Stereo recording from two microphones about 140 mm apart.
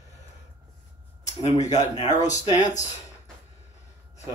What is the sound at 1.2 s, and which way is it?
Speech, 55° left (ahead or behind).